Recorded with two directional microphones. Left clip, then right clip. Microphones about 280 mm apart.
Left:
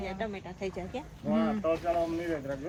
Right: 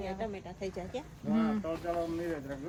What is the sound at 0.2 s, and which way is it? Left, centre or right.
Speech, left.